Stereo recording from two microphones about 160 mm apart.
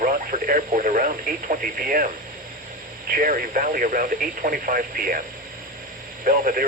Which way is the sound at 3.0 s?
60° right (ahead or behind).